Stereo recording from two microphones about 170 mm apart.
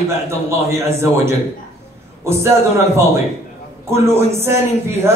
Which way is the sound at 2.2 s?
15° right (ahead or behind).